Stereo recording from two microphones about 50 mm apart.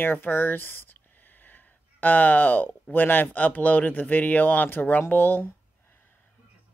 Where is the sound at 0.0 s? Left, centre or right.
Left.